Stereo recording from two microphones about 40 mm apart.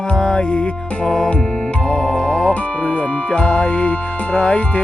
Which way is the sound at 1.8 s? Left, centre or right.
Left.